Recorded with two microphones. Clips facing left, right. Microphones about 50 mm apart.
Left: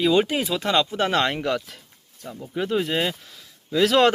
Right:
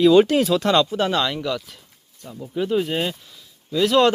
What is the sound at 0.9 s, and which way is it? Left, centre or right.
Speech, left.